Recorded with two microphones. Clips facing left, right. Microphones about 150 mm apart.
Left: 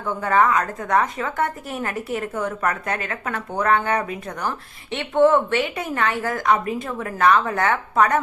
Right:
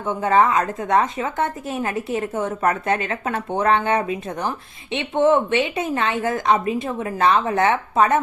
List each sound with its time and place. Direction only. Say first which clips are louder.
0.0 s a woman's voice: right 2 dB; 20° right (ahead or behind)